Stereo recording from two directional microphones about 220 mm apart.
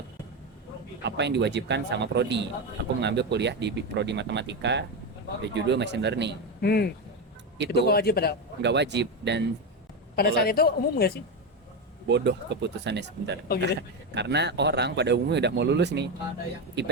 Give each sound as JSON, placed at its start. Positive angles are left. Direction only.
{"t": 1.0, "sound": "a man's voice", "side_deg": -50}
{"t": 6.6, "sound": "a woman's voice", "side_deg": 45}
{"t": 8.6, "sound": "a man's voice", "side_deg": -50}
{"t": 10.2, "sound": "a woman's voice", "side_deg": 45}
{"t": 12.0, "sound": "a man's voice", "side_deg": -50}